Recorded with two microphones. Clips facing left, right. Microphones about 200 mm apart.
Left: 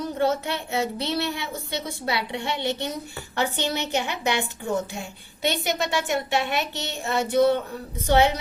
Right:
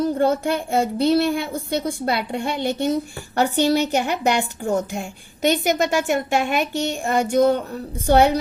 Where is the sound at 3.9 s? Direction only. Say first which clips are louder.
Right 5 dB; 55° right (ahead or behind).